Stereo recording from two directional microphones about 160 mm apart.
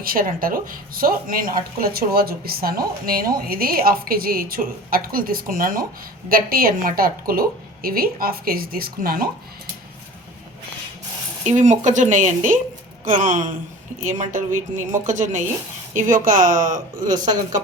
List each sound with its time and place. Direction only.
0.0 s a woman's voice: 65° right (ahead or behind)
11.4 s a woman's voice: 50° right (ahead or behind)